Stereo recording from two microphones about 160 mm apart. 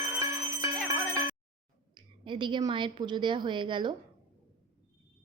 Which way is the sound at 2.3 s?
30° right (ahead or behind).